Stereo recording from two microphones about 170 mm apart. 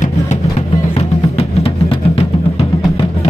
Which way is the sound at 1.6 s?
35° left (ahead or behind).